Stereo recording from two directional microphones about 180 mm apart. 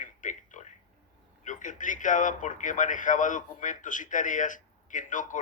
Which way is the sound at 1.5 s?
45° left (ahead or behind).